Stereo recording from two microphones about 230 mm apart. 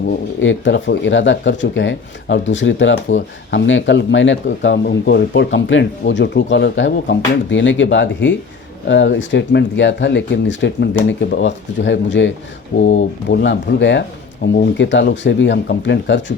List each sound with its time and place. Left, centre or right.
0.3 s speech: left